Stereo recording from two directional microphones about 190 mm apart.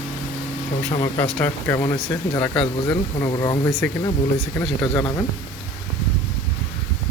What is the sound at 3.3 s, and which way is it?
Speech, 25° left (ahead or behind).